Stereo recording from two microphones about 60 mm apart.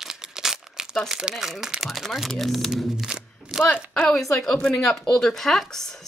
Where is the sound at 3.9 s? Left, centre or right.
Centre.